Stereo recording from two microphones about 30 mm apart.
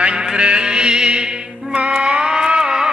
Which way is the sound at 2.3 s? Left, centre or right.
Right.